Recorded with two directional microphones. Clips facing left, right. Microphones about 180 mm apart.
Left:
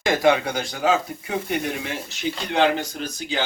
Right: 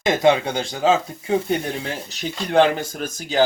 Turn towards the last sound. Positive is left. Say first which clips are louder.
# right 7 dB
turn(degrees=-45)  # may be behind; listen again after turning